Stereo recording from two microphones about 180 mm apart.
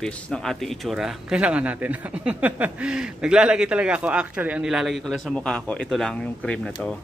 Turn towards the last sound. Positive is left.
turn(degrees=5)  # may be behind; listen again after turning